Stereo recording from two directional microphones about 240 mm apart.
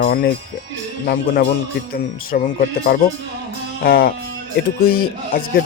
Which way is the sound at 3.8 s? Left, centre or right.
Left.